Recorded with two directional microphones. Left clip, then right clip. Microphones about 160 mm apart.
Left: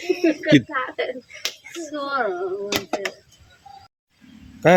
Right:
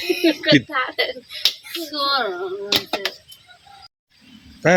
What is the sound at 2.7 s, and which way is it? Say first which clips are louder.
Speech: right 8 dB; 25° left (ahead or behind).